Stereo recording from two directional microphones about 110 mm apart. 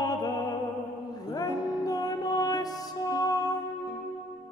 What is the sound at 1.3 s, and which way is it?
Music, 35° left (ahead or behind).